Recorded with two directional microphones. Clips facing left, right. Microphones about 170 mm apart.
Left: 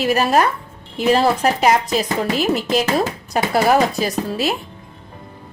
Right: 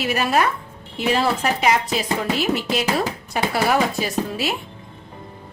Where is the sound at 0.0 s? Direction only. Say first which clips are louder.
Left 4 dB; 40° left (ahead or behind).